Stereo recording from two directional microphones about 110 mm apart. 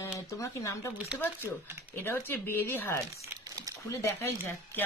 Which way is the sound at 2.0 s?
20° left (ahead or behind).